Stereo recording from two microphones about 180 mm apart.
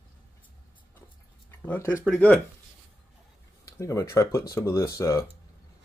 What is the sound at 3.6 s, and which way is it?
Speech, 15° left (ahead or behind).